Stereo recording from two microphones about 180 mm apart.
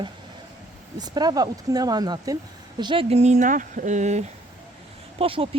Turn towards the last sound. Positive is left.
turn(degrees=-30)  # may be behind; listen again after turning